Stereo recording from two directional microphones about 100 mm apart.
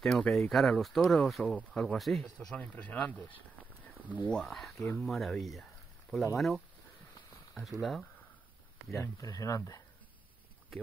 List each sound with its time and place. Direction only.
0.0 s speech: 5° left (ahead or behind)
2.3 s speech: 15° left (ahead or behind)
4.7 s speech: 20° left (ahead or behind)
5.0 s speech: centre (ahead or behind)
7.8 s speech: centre (ahead or behind)
9.0 s speech: 35° left (ahead or behind)